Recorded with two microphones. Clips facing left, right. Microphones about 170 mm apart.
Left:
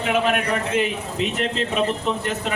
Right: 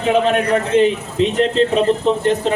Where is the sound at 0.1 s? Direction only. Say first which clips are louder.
Right 7 dB; 30° right (ahead or behind).